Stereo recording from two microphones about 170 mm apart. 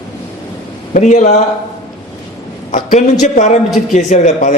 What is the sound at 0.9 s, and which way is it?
Speech, 45° left (ahead or behind).